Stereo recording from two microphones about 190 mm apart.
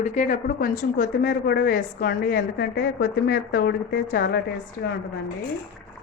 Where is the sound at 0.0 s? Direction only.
40° left (ahead or behind); by 4.4 s 55° left (ahead or behind).